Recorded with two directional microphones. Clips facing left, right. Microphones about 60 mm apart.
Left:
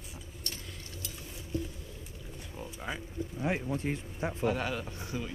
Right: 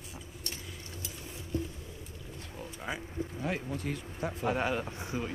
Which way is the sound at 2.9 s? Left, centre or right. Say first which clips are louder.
Right 1 dB; centre.